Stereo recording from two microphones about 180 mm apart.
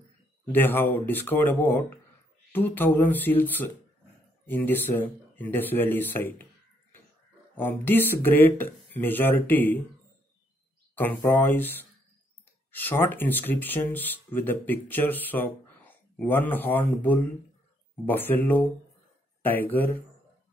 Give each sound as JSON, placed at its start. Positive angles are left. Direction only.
{"t": 0.5, "sound": "speech", "side_deg": 10}
{"t": 7.5, "sound": "speech", "side_deg": 10}
{"t": 11.0, "sound": "speech", "side_deg": 10}
{"t": 12.7, "sound": "speech", "side_deg": 10}